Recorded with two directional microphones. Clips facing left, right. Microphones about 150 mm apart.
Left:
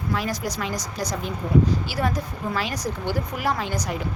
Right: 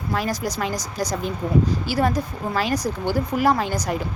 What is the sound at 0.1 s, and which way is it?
Speech, 40° right (ahead or behind).